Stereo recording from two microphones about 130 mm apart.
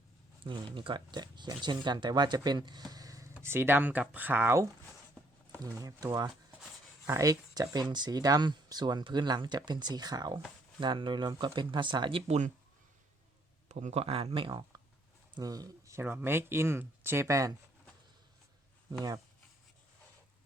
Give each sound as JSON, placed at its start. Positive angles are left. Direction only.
{"t": 0.4, "sound": "speech", "side_deg": -40}
{"t": 3.4, "sound": "speech", "side_deg": -15}
{"t": 5.7, "sound": "speech", "side_deg": -25}
{"t": 13.7, "sound": "speech", "side_deg": -65}
{"t": 15.4, "sound": "speech", "side_deg": -30}